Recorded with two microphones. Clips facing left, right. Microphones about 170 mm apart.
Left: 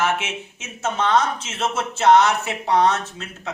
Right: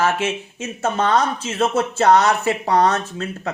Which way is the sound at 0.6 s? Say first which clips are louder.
Right 3 dB; 60° right (ahead or behind).